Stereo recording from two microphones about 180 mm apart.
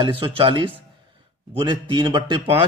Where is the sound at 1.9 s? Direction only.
25° right (ahead or behind).